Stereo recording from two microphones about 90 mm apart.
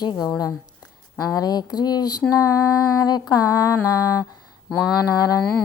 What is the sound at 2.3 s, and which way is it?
Mantra, 35° left (ahead or behind).